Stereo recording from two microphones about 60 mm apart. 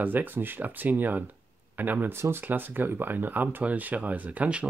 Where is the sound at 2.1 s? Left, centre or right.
Right.